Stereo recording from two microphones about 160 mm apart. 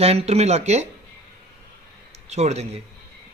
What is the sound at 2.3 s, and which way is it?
Speech, 45° right (ahead or behind).